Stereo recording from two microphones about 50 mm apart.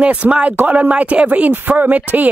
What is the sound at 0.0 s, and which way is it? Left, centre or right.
Speech, right.